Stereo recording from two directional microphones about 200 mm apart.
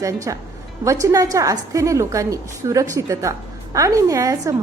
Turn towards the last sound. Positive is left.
turn(degrees=-15)  # may be behind; listen again after turning